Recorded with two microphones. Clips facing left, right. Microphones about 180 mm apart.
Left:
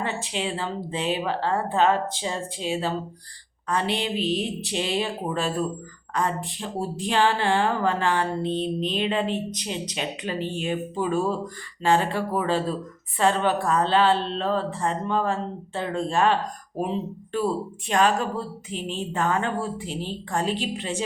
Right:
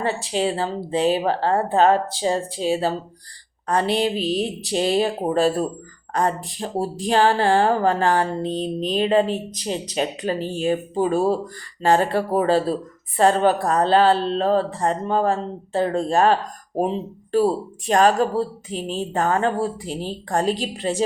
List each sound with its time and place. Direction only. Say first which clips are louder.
0.0 s a woman's voice: right 6 dB; 35° right (ahead or behind)